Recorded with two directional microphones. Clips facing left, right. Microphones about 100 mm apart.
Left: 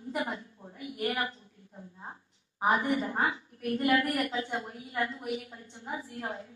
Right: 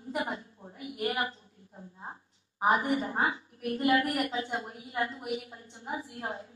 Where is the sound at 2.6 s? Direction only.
25° right (ahead or behind).